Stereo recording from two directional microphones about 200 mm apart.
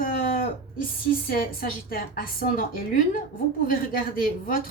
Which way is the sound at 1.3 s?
45° left (ahead or behind).